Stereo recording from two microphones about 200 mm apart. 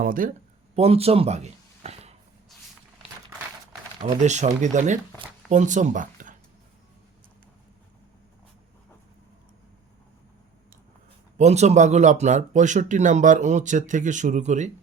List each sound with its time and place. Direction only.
0.0 s speech: 45° right (ahead or behind)
0.8 s speech: 30° right (ahead or behind)
4.2 s speech: 35° right (ahead or behind)
11.3 s speech: 35° right (ahead or behind)